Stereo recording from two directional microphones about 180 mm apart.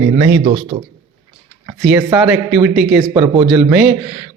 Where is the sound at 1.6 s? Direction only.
5° right (ahead or behind).